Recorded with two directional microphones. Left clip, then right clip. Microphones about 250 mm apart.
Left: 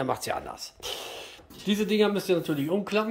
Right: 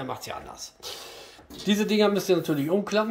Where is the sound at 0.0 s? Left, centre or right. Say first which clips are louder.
Left 5 dB; left.